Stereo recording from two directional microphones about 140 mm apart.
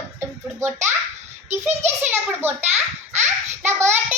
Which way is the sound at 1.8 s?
15° right (ahead or behind).